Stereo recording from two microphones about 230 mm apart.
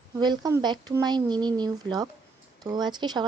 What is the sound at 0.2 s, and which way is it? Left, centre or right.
Speech, centre.